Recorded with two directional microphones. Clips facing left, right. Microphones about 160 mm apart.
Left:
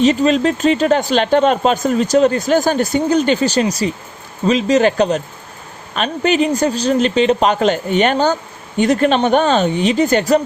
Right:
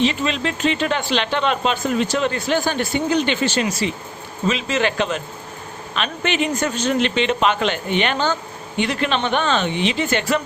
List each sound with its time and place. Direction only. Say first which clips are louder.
0.0 s speech: left 8 dB; 40° left (ahead or behind)